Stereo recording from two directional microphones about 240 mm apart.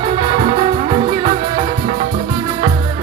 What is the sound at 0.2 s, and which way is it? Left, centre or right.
Music, right.